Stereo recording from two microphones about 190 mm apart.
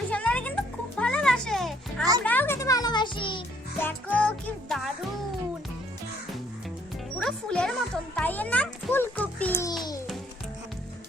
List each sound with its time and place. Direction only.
0.1 s music: 5° left (ahead or behind); by 3.4 s 25° left (ahead or behind)
3.8 s music: 10° left (ahead or behind)
7.2 s a child's voice: 5° left (ahead or behind)
9.6 s babbling: 20° left (ahead or behind)